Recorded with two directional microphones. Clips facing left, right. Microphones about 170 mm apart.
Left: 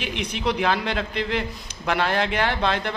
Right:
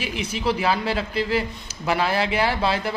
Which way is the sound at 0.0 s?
5° right (ahead or behind).